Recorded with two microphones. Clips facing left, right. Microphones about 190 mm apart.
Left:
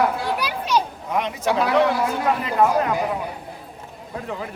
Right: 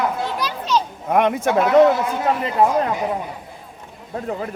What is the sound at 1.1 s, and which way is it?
Speech, 55° right (ahead or behind).